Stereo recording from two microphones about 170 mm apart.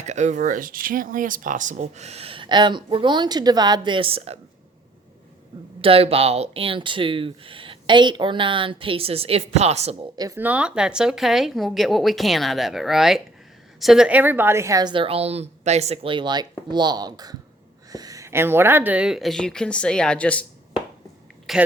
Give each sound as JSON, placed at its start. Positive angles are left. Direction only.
{"t": 0.0, "sound": "speech", "side_deg": -40}
{"t": 5.8, "sound": "speech", "side_deg": -35}
{"t": 10.2, "sound": "a woman's voice", "side_deg": -15}
{"t": 21.5, "sound": "a woman's voice", "side_deg": 0}